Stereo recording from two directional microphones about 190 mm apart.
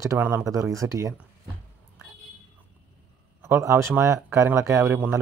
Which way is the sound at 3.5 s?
15° right (ahead or behind).